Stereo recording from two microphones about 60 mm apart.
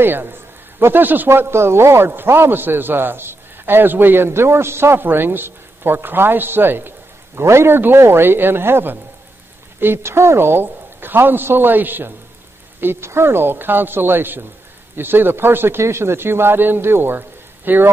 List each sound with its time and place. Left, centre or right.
0.0 s a man's voice: right
12.8 s a man's voice: right